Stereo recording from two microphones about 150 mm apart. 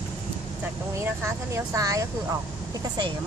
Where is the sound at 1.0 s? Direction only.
20° right (ahead or behind).